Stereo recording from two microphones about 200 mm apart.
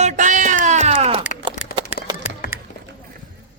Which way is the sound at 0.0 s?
40° right (ahead or behind).